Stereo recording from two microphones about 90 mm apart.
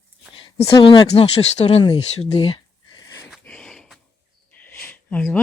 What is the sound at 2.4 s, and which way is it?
Speech, 65° left (ahead or behind).